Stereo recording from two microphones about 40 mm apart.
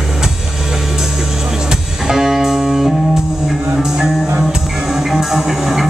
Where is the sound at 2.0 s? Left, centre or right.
Centre.